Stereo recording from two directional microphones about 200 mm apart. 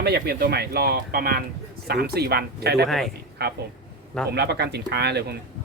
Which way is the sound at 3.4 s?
55° right (ahead or behind).